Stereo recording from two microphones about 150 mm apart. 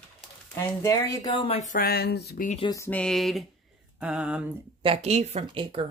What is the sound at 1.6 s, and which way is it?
Speech, 75° left (ahead or behind).